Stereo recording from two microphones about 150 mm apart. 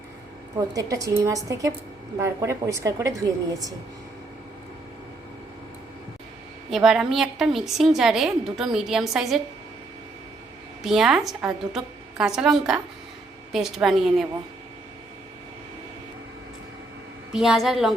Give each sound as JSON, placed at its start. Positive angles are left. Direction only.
{"t": 0.5, "sound": "a woman's voice", "side_deg": -25}
{"t": 6.7, "sound": "a woman's voice", "side_deg": -5}
{"t": 10.8, "sound": "a woman's voice", "side_deg": 0}
{"t": 17.3, "sound": "a woman's voice", "side_deg": -5}